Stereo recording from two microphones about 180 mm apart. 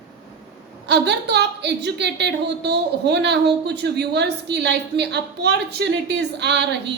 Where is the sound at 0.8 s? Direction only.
70° right (ahead or behind).